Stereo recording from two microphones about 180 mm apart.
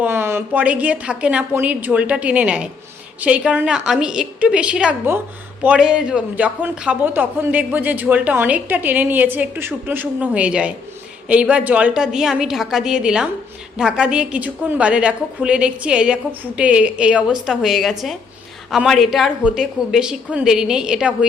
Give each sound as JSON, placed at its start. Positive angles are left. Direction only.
{"t": 0.0, "sound": "a woman's voice", "side_deg": -10}